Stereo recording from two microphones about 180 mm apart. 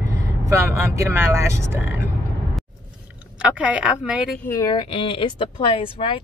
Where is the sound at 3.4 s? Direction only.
5° right (ahead or behind).